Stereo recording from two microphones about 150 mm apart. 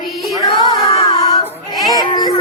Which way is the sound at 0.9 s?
40° left (ahead or behind).